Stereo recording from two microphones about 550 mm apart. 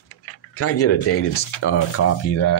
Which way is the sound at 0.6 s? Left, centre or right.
Left.